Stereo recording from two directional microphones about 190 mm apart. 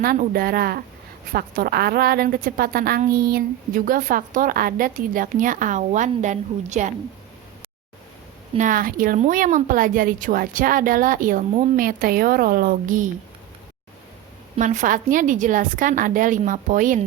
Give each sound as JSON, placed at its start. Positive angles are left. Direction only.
{"t": 0.0, "sound": "a woman's voice", "side_deg": -50}
{"t": 8.5, "sound": "a woman's voice", "side_deg": -45}
{"t": 14.5, "sound": "a woman's voice", "side_deg": -40}